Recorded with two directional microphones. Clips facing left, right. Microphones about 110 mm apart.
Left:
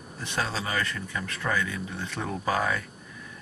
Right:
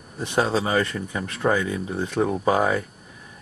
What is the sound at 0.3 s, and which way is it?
Speech, 25° right (ahead or behind).